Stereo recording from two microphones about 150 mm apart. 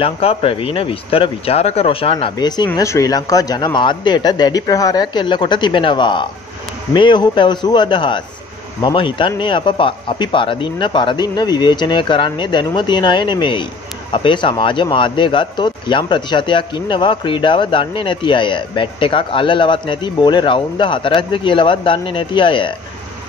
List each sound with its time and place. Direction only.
0.0 s a man's voice: 40° left (ahead or behind)